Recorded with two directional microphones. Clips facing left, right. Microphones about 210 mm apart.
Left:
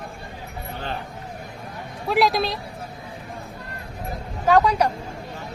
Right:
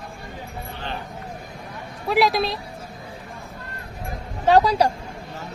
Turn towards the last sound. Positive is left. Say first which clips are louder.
# right 1 dB
turn(degrees=-35)  # may be behind; listen again after turning